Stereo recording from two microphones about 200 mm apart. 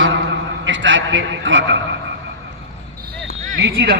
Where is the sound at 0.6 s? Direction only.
65° right (ahead or behind).